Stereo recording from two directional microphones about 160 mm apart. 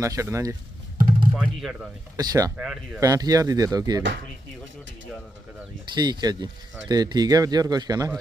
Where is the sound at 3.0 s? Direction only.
20° right (ahead or behind).